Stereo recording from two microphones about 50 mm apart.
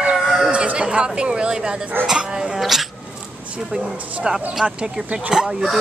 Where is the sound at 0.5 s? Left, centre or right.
Right.